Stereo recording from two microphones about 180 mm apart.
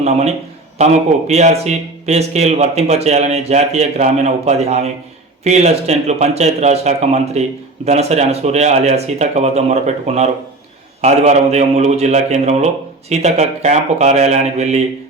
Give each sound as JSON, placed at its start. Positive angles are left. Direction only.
{"t": 0.0, "sound": "speech", "side_deg": -40}